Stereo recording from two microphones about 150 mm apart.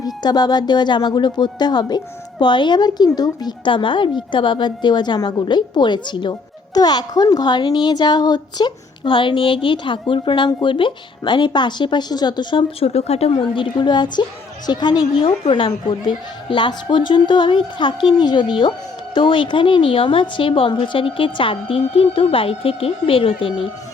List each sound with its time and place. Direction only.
0.0 s a child's voice: 25° left (ahead or behind)